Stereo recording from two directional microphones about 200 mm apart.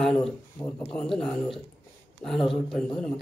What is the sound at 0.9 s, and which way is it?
Speech, centre (ahead or behind).